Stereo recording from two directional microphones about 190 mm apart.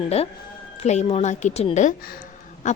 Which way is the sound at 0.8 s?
35° left (ahead or behind).